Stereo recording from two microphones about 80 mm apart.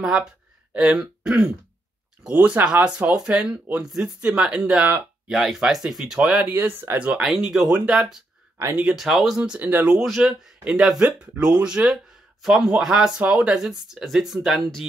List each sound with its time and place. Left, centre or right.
0.0 s speech: centre
2.2 s speech: centre
6.5 s speech: right
7.1 s speech: centre
7.7 s speech: centre
8.9 s speech: centre
9.4 s speech: centre
9.8 s speech: centre